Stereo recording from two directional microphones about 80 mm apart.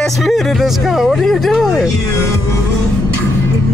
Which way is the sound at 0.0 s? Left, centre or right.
Centre.